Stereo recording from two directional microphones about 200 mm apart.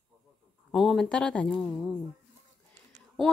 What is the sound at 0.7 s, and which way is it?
Speech, centre (ahead or behind).